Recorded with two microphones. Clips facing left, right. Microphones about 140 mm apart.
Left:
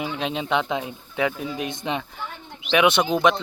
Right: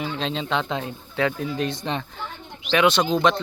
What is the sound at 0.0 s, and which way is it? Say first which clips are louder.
Speech: even; 15° left (ahead or behind).